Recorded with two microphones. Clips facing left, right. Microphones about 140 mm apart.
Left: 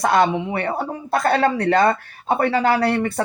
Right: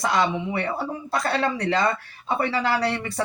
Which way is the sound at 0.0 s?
55° left (ahead or behind).